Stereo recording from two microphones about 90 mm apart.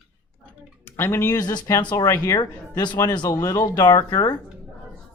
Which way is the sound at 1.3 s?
50° left (ahead or behind).